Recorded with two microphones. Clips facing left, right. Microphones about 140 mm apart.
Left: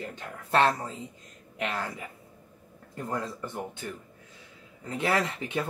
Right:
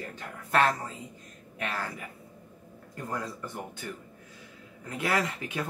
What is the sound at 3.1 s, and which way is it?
Speech, 25° left (ahead or behind).